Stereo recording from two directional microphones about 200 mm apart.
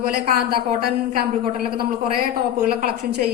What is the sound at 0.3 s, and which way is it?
Speech, 50° right (ahead or behind).